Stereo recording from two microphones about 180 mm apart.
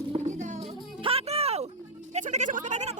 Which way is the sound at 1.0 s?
35° right (ahead or behind).